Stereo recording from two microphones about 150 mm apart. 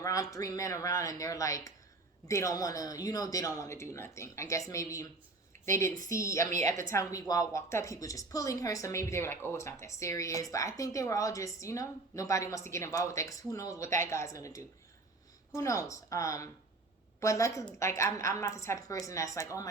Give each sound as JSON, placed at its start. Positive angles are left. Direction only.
{"t": 0.0, "sound": "a woman's voice", "side_deg": 20}